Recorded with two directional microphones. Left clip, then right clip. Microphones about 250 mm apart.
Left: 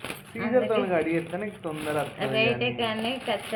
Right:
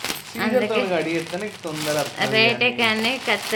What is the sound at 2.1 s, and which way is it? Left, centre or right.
Speech, right.